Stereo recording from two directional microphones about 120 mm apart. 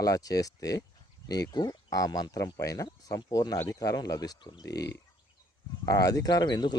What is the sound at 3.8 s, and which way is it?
Speech, 30° left (ahead or behind).